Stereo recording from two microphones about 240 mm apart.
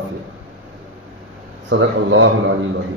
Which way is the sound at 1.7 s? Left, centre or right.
Right.